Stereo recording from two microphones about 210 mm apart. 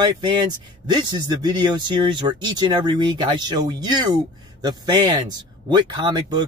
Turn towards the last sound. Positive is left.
turn(degrees=-20)  # may be behind; listen again after turning